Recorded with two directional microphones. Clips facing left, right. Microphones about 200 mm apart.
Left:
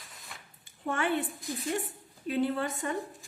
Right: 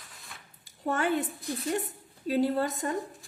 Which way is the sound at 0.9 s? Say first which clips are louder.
Right 2 dB; 40° right (ahead or behind).